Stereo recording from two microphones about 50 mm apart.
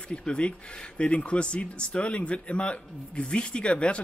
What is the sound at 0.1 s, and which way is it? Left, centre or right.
Speech, left.